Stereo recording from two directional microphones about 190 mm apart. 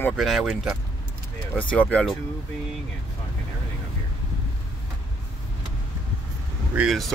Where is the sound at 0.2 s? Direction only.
Centre (ahead or behind).